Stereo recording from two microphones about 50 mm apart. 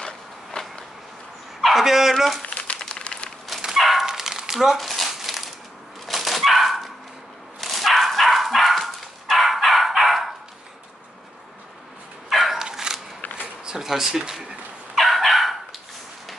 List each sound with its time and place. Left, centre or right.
0.0 s a sound: centre
1.6 s speech: centre
2.4 s crumpling: left
2.8 s a sound: centre
3.7 s dog: centre
4.0 s crumpling: centre
6.0 s dog: centre
12.3 s dog: centre
12.5 s dog: centre
13.4 s a sound: centre
15.0 s dog: centre